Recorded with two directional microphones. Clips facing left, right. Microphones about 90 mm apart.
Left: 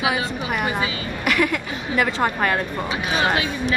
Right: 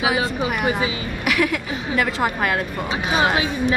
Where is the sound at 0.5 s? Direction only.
5° right (ahead or behind).